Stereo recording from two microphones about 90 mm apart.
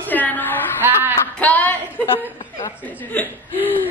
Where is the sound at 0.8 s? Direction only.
25° right (ahead or behind).